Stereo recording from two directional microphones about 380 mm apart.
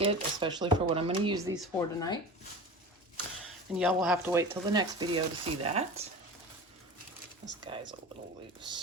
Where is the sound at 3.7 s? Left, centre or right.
Centre.